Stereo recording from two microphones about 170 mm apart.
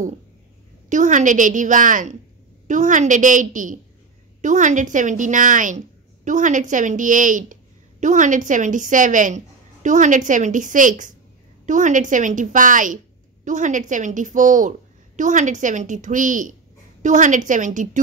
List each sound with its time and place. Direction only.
0.8 s a woman's voice: 45° right (ahead or behind)